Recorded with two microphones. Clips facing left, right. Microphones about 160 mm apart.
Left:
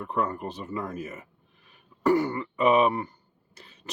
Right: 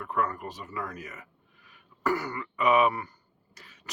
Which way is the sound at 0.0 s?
25° left (ahead or behind).